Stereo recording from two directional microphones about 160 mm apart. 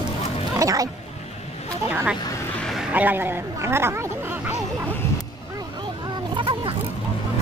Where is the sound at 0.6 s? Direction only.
20° right (ahead or behind).